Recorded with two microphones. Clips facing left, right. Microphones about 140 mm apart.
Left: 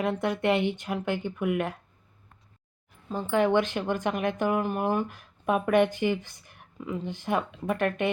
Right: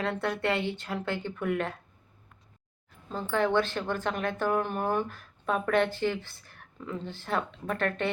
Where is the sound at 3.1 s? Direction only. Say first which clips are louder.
Left 3 dB; 15° left (ahead or behind).